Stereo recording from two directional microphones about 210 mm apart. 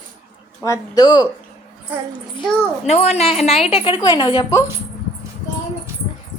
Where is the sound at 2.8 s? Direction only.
30° left (ahead or behind).